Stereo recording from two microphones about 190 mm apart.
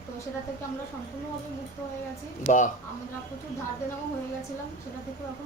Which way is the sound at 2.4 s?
40° left (ahead or behind).